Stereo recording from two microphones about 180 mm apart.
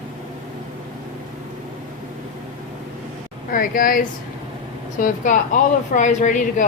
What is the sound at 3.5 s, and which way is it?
Speech, 50° left (ahead or behind).